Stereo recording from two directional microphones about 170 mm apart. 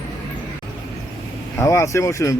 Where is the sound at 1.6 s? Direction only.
15° left (ahead or behind).